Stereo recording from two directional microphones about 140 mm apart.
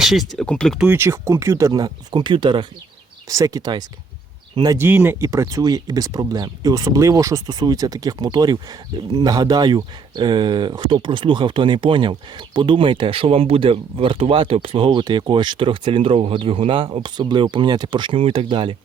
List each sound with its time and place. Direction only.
0.0 s speech: centre (ahead or behind)
0.8 s speech: 15° right (ahead or behind)
4.9 s speech: 15° right (ahead or behind); by 18.8 s 35° right (ahead or behind)